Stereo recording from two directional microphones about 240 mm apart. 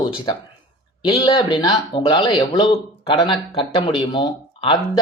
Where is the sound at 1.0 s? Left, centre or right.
Centre.